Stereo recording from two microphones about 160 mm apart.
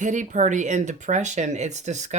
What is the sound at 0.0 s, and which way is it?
Speech, 50° right (ahead or behind).